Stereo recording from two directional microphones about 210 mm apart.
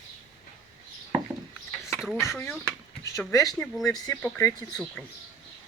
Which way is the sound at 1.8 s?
Centre (ahead or behind).